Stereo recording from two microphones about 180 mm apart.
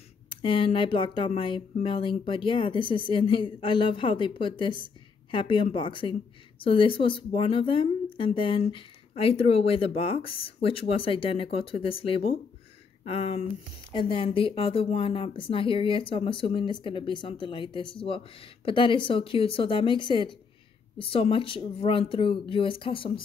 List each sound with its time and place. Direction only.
0.3 s speech: 30° left (ahead or behind)